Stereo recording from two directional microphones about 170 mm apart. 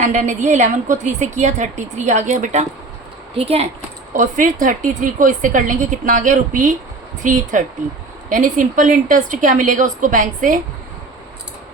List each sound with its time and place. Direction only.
0.0 s a woman's voice: 45° right (ahead or behind)
4.1 s a woman's voice: 50° right (ahead or behind)